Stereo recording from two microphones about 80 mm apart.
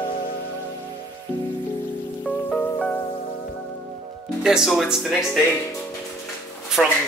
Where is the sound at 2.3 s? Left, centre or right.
Centre.